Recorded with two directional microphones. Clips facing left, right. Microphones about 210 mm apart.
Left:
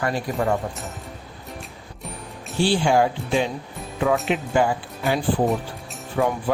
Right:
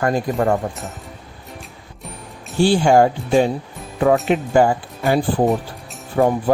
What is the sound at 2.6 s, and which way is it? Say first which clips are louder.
Speech: right 5 dB; 45° right (ahead or behind).